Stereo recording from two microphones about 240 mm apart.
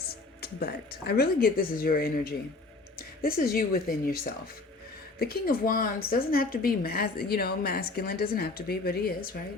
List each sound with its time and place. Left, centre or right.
0.0 s a woman's voice: left